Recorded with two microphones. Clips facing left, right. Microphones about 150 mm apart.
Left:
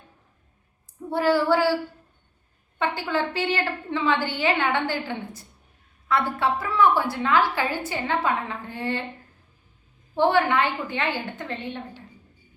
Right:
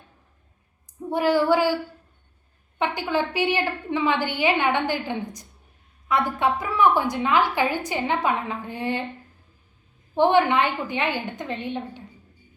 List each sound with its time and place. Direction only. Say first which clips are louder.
1.1 s a woman's voice: right 1 dB; 15° right (ahead or behind)
2.7 s a woman's voice: right 1 dB; 15° right (ahead or behind)
10.2 s a woman's voice: right 2 dB; 20° right (ahead or behind)